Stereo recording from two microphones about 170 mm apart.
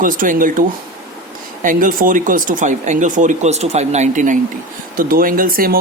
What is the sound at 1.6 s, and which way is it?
Speech, 55° right (ahead or behind).